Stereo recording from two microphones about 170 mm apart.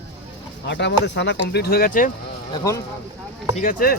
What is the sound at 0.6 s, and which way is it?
Speech, 90° left.